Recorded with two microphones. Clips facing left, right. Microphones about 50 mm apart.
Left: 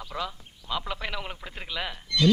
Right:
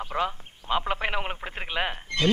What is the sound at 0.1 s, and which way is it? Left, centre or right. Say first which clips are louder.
A man's voice: right 5 dB; right.